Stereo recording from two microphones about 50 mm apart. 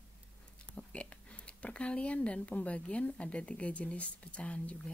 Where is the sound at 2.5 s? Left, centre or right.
Left.